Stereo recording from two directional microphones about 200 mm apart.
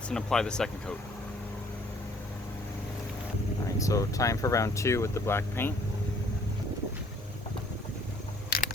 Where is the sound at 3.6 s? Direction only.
15° left (ahead or behind).